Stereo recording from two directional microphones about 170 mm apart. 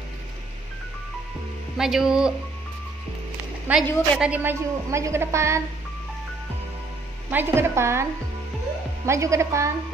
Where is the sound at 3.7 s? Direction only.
10° right (ahead or behind).